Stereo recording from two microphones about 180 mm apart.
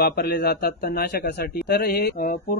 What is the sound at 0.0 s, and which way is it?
Speech, 60° left (ahead or behind).